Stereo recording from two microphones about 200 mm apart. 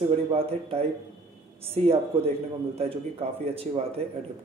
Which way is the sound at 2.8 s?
30° right (ahead or behind).